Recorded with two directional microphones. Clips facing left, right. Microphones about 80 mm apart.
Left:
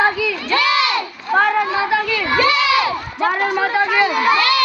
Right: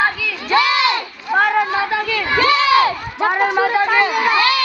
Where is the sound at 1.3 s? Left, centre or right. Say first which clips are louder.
Even; centre.